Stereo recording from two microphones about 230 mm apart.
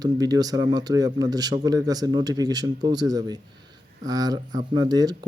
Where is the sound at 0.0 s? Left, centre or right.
Centre.